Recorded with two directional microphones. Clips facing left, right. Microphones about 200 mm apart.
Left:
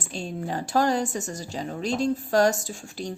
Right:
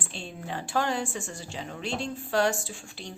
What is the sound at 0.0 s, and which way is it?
Speech, 40° left (ahead or behind).